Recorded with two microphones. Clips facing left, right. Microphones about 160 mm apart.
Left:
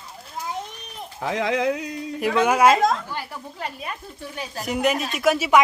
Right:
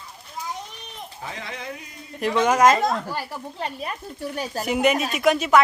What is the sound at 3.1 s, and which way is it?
Speech, 30° right (ahead or behind).